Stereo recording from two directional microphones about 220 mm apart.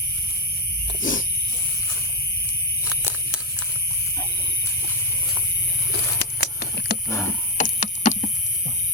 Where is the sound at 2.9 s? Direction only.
10° right (ahead or behind).